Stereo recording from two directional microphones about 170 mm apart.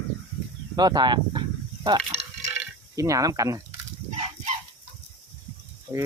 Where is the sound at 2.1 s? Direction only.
40° right (ahead or behind).